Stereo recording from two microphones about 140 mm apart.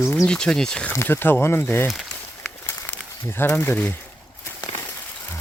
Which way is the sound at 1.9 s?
Centre (ahead or behind).